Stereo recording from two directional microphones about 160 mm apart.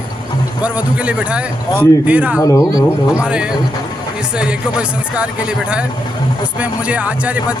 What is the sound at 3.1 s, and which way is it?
A man's voice, 5° right (ahead or behind).